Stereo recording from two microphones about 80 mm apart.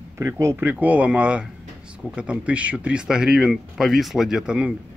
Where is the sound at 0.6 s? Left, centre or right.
Centre.